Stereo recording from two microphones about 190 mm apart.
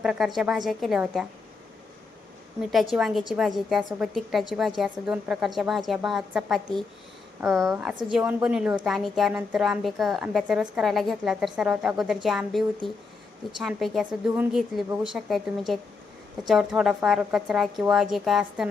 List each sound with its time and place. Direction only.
0.0 s a woman's voice: centre (ahead or behind)
2.6 s a woman's voice: centre (ahead or behind)